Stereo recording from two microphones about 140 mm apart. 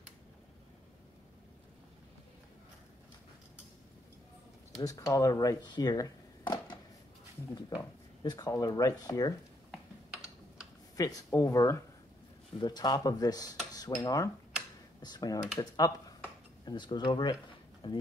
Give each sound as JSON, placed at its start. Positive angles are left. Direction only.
{"t": 4.7, "sound": "speech", "side_deg": 25}
{"t": 11.0, "sound": "speech", "side_deg": 25}